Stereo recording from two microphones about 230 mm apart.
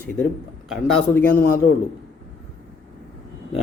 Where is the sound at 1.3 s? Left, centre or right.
Left.